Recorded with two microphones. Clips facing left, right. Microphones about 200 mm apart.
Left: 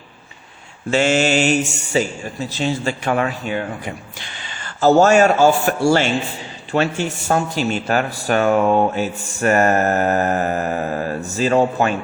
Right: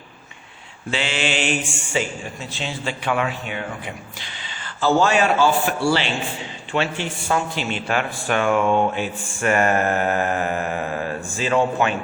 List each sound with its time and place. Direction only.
0.9 s speech: 45° left (ahead or behind)